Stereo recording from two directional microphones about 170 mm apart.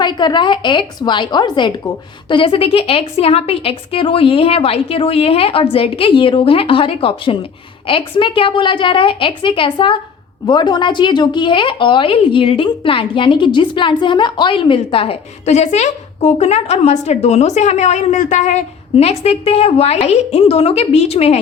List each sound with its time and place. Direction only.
0.0 s a woman's voice: 25° left (ahead or behind)